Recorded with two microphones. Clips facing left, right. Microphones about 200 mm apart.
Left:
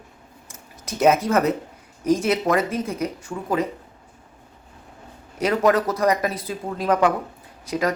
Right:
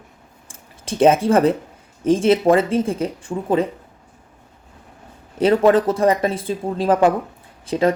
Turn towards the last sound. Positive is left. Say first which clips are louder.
# right 5 dB
turn(degrees=-30)  # may be behind; listen again after turning